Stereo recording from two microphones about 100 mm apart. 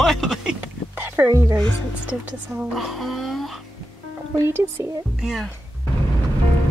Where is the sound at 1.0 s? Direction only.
25° right (ahead or behind).